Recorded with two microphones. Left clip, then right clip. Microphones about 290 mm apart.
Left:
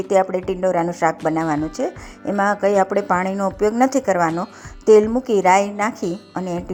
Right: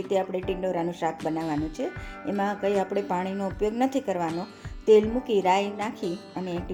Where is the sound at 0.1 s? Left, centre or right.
Centre.